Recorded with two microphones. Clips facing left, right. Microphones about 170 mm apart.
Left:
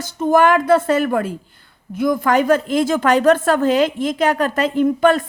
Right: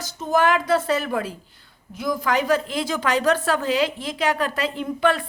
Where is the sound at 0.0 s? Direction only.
55° left (ahead or behind).